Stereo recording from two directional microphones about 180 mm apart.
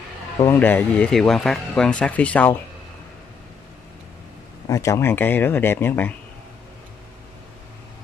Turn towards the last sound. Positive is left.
turn(degrees=10)  # may be behind; listen again after turning